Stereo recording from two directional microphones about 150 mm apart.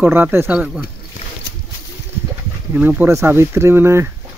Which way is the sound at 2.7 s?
10° right (ahead or behind).